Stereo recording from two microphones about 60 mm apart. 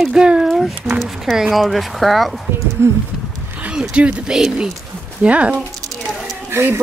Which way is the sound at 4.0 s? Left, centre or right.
Centre.